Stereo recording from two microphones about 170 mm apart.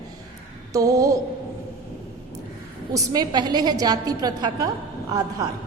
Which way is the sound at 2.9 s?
20° right (ahead or behind).